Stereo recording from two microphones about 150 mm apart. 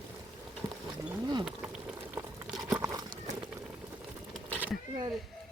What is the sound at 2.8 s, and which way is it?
Horse, 20° right (ahead or behind).